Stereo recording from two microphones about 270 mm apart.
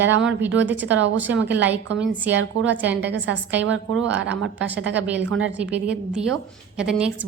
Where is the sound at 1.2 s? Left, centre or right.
Centre.